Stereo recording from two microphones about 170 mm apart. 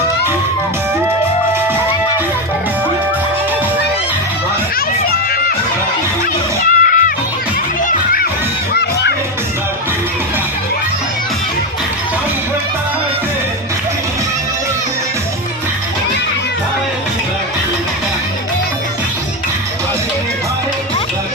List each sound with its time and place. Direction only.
6.6 s music: 55° left (ahead or behind)
7.9 s children shouting: 55° left (ahead or behind)